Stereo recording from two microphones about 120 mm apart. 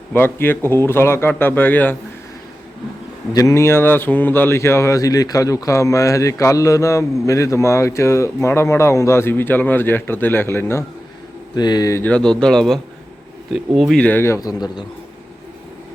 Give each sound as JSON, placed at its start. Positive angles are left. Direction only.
{"t": 0.1, "sound": "speech", "side_deg": 15}
{"t": 3.3, "sound": "speech", "side_deg": 25}
{"t": 11.5, "sound": "speech", "side_deg": 35}
{"t": 12.0, "sound": "a man's voice", "side_deg": 5}
{"t": 14.0, "sound": "speech", "side_deg": 15}